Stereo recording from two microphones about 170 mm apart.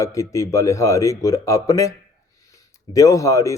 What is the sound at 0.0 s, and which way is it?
Speech, 20° left (ahead or behind).